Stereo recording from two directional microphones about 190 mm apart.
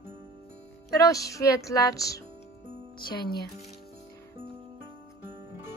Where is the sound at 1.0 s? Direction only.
15° left (ahead or behind).